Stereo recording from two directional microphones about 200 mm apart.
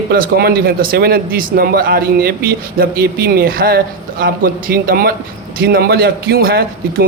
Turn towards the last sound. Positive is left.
turn(degrees=-50)  # may be behind; listen again after turning